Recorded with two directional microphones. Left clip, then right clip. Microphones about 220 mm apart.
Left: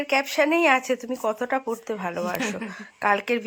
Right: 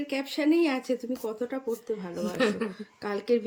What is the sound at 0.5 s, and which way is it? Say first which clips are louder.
Speech: left 7 dB; 25° left (ahead or behind).